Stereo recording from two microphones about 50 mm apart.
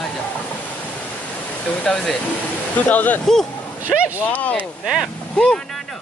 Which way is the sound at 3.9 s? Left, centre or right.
Centre.